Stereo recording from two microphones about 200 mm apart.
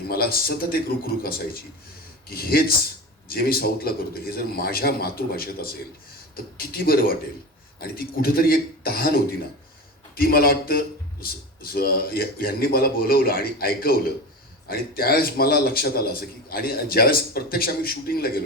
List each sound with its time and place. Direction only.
0.1 s speech: 50° left (ahead or behind)
2.3 s speech: 50° left (ahead or behind)
6.6 s speech: 50° left (ahead or behind)
10.2 s speech: 50° left (ahead or behind)